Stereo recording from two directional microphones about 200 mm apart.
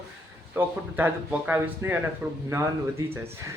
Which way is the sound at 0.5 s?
10° right (ahead or behind).